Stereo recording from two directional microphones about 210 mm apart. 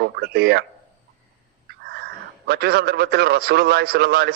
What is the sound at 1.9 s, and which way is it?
A man's voice, 50° right (ahead or behind).